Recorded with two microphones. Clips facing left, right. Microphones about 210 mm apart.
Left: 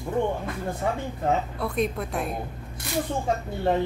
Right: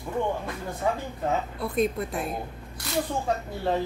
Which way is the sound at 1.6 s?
Centre (ahead or behind).